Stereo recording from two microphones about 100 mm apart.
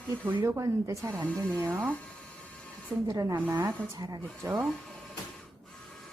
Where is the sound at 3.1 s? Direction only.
35° right (ahead or behind).